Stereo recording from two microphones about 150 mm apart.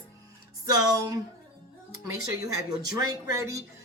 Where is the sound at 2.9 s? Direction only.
20° right (ahead or behind).